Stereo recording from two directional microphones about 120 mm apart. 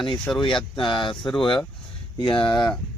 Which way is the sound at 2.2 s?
45° left (ahead or behind).